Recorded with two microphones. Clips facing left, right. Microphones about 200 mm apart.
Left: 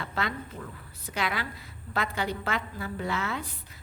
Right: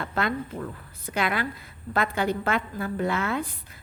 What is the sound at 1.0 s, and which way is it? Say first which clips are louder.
A woman's voice: right 5 dB; 55° right (ahead or behind).